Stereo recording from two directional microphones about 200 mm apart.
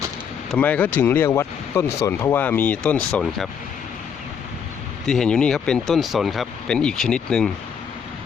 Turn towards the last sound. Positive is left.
turn(degrees=5)  # may be behind; listen again after turning